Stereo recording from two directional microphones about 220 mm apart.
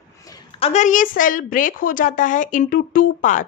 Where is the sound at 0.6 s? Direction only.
30° left (ahead or behind).